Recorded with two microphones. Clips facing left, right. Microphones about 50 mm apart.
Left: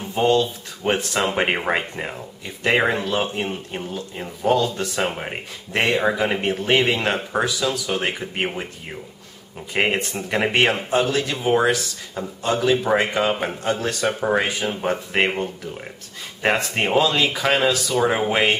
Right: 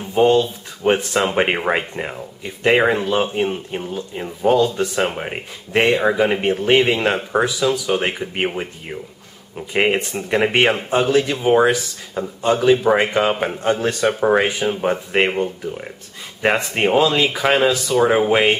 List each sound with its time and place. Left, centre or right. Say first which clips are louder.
0.1 s speech: right 4 dB; centre